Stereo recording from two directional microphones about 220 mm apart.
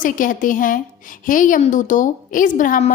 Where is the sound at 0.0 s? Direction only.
35° left (ahead or behind).